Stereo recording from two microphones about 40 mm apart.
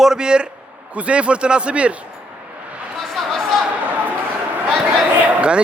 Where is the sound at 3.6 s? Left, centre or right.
Right.